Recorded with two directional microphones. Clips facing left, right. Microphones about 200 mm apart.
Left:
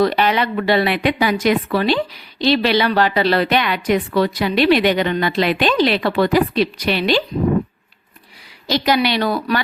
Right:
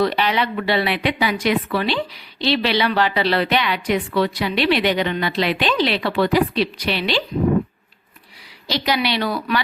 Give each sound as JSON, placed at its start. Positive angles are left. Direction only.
{"t": 0.0, "sound": "a woman's voice", "side_deg": 45}
{"t": 8.6, "sound": "a woman's voice", "side_deg": 50}